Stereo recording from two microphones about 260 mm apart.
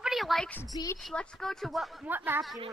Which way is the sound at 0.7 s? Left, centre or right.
Centre.